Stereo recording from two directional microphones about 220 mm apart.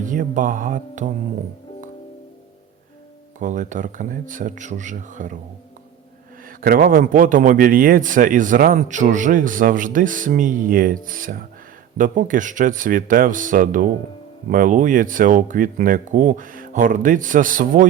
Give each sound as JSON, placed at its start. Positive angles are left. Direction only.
{"t": 0.0, "sound": "a man's voice", "side_deg": -35}
{"t": 3.3, "sound": "a man's voice", "side_deg": -35}
{"t": 6.4, "sound": "a man's voice", "side_deg": -40}